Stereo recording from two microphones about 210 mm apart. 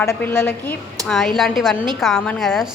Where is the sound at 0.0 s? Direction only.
10° left (ahead or behind).